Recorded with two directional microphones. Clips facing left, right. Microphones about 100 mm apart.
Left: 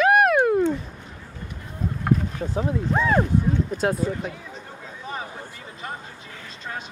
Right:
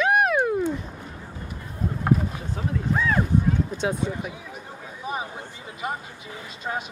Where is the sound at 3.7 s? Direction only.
Centre (ahead or behind).